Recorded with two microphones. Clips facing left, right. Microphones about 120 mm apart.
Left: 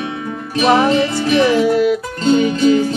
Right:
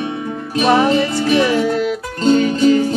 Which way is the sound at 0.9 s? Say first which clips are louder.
Left 1 dB; 20° left (ahead or behind).